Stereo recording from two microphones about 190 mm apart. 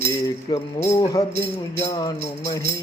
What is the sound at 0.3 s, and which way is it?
Speech, 20° left (ahead or behind).